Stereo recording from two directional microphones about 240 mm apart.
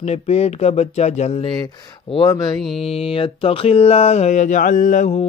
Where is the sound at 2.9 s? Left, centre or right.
Left.